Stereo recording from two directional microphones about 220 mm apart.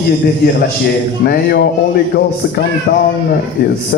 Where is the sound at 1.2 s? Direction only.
45° left (ahead or behind).